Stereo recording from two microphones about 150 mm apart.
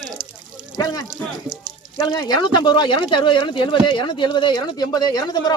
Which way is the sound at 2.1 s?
25° left (ahead or behind).